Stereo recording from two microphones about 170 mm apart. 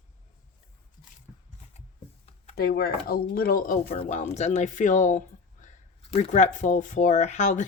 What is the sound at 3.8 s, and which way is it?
Speech, 35° left (ahead or behind).